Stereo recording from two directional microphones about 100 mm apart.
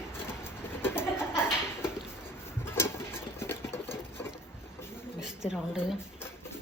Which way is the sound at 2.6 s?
25° left (ahead or behind).